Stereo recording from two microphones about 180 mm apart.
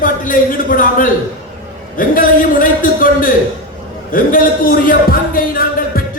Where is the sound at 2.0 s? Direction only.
50° left (ahead or behind).